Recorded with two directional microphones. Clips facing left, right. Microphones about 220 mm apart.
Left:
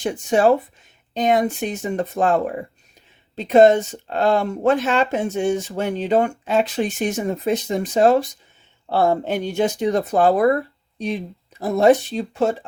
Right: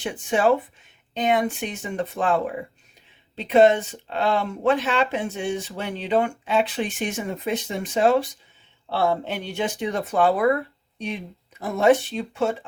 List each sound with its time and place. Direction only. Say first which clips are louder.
0.0 s speech: left 4 dB; 40° left (ahead or behind)